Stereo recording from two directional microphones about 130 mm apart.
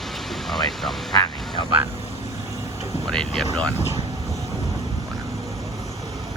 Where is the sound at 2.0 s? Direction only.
55° left (ahead or behind).